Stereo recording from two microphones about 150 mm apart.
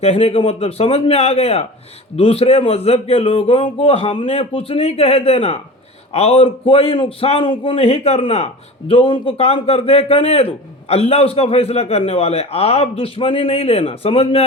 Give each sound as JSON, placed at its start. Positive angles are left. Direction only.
{"t": 0.0, "sound": "a man's voice", "side_deg": 40}